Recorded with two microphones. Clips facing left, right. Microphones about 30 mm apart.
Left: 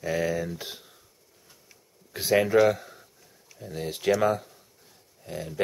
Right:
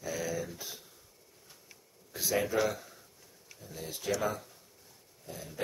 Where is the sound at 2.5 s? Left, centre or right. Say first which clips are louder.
Left 10 dB; left.